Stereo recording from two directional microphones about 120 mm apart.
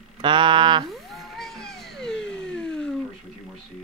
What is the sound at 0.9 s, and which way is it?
Music, centre (ahead or behind).